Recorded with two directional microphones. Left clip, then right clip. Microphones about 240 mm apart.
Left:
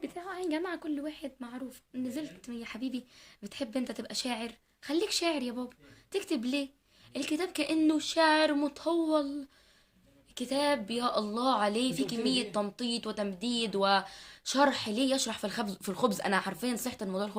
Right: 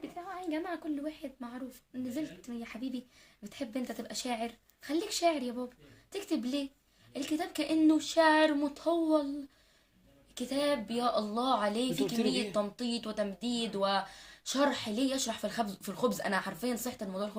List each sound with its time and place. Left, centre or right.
0.0 s a woman's voice: left
10.3 s speech: left